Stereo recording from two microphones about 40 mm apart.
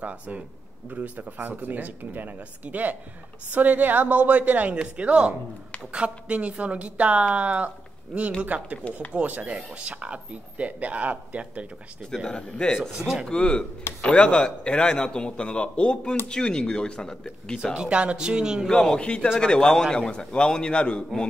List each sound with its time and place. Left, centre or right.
0.0 s a woman's voice: right
4.7 s a woman's voice: right
9.5 s a woman's voice: right
12.3 s a man's voice: left
12.9 s speech: centre
13.3 s a man's voice: left
17.7 s speech: right
18.7 s a man's voice: centre